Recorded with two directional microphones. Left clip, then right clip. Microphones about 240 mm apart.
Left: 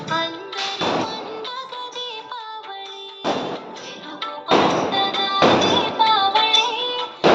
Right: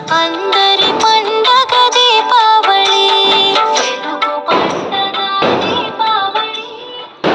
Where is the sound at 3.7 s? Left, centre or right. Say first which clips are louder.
Right 18 dB; right.